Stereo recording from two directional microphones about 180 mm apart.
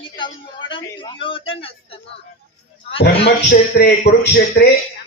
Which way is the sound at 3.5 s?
60° left (ahead or behind).